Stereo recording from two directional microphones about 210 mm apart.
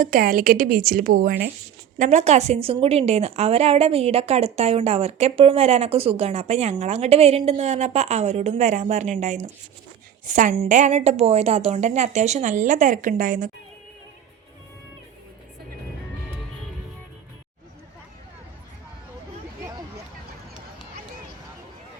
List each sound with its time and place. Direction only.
0.0 s a woman's voice: 40° right (ahead or behind)
2.0 s a woman's voice: 30° right (ahead or behind)